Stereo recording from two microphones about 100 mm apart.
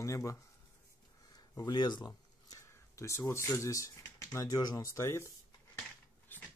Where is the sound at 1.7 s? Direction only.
45° left (ahead or behind).